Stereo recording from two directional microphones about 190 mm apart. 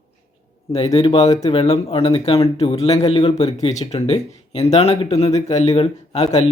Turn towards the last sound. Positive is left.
turn(degrees=35)  # may be behind; listen again after turning